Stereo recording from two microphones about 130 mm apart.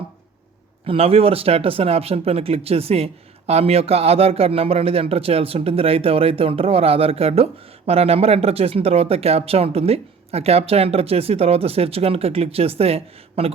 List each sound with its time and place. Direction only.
0.9 s speech: 45° right (ahead or behind)